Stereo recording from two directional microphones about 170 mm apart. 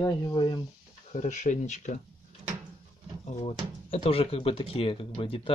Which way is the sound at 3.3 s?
35° left (ahead or behind).